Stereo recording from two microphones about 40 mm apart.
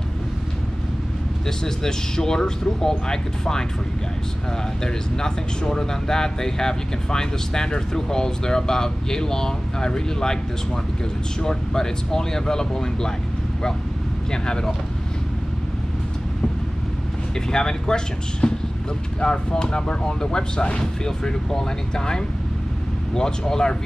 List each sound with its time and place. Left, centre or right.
1.6 s speech: centre
4.8 s speech: centre
11.4 s speech: centre
14.3 s speech: centre
17.5 s speech: centre